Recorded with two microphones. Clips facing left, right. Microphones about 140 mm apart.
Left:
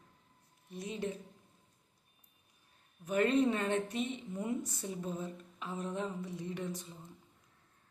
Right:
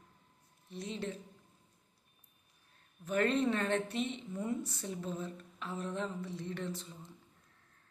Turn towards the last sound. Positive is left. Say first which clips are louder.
# even
turn(degrees=15)  # may be behind; listen again after turning